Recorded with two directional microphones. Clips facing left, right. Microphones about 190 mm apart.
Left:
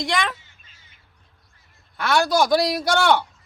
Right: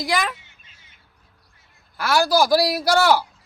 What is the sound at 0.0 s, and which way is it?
Speech, 5° right (ahead or behind).